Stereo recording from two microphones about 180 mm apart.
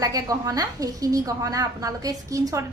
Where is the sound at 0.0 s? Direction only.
20° right (ahead or behind).